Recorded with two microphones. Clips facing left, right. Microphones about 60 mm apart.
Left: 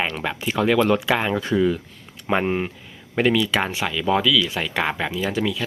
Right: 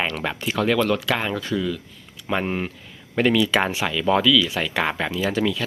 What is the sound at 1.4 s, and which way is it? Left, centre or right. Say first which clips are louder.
Speech: left 5 dB; left.